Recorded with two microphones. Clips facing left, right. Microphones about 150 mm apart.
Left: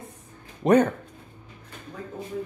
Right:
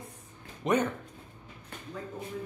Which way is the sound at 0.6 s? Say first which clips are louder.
Left 9 dB; 40° left (ahead or behind).